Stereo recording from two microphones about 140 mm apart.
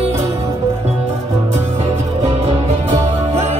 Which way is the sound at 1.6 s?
50° right (ahead or behind).